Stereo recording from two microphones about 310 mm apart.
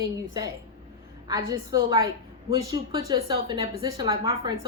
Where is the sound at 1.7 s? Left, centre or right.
Centre.